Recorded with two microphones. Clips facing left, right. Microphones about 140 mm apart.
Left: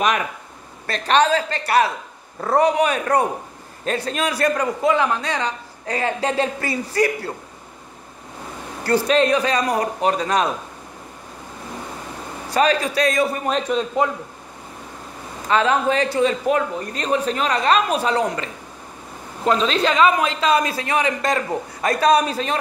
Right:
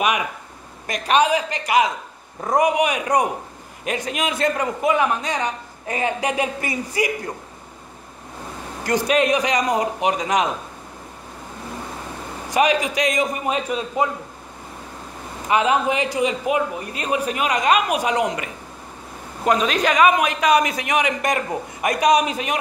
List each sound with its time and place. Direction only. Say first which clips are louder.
0.0 s a man's voice: left 1 dB; 10° right (ahead or behind)
8.8 s a man's voice: left 2 dB; 15° right (ahead or behind)
12.4 s a man's voice: even; 15° right (ahead or behind)
15.4 s a man's voice: even; 15° right (ahead or behind)